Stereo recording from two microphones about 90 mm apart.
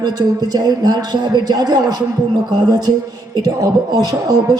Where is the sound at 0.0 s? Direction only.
45° right (ahead or behind).